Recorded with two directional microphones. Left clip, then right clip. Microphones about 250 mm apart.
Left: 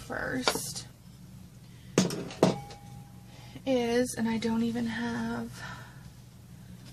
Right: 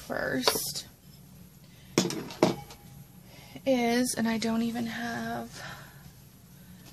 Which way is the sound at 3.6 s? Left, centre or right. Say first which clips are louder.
Right 1 dB; right.